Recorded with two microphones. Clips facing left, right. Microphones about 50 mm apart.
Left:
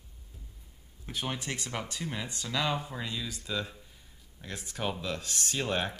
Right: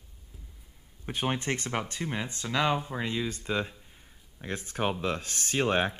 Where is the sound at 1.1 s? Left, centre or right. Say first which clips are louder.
Right 5 dB; right.